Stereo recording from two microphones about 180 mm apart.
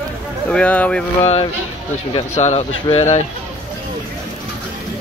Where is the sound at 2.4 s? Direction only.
40° left (ahead or behind).